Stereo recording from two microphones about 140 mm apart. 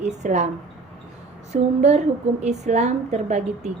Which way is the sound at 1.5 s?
50° right (ahead or behind).